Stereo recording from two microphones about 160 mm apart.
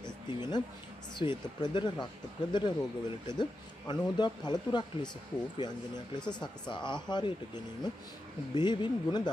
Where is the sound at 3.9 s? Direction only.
25° left (ahead or behind).